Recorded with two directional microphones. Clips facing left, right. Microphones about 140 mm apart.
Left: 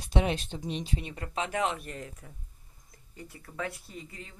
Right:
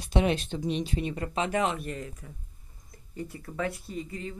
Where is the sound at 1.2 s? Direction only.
Centre (ahead or behind).